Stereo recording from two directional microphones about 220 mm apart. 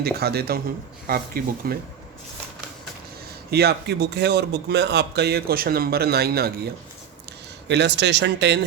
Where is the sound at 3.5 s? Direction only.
45° right (ahead or behind).